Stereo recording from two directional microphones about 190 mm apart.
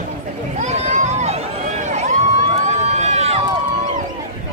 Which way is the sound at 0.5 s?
40° right (ahead or behind).